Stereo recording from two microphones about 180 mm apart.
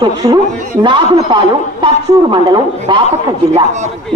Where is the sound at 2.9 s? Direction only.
25° right (ahead or behind).